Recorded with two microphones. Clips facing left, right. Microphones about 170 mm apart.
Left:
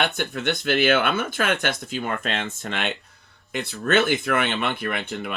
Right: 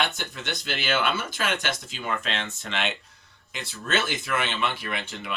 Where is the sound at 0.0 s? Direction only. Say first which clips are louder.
Left 5 dB; 55° left (ahead or behind).